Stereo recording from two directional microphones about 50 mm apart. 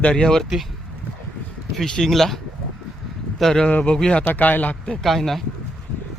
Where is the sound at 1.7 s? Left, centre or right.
Centre.